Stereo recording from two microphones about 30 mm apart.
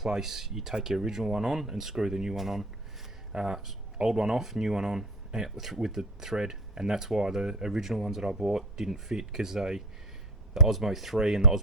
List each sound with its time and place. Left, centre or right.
0.0 s speech: centre
3.3 s speech: right